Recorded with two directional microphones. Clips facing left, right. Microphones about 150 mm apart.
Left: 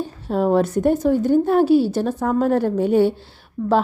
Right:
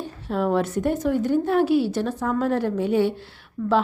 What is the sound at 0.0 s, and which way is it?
A woman's voice, 35° left (ahead or behind).